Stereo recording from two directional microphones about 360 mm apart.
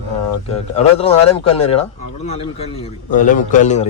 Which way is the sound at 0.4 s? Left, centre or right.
Centre.